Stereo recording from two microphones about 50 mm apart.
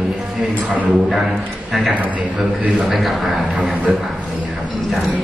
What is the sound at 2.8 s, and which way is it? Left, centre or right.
Speech, centre.